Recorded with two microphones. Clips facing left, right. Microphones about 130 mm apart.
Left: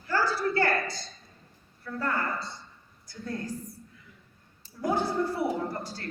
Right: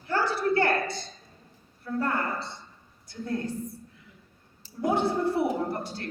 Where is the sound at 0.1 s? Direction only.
25° right (ahead or behind).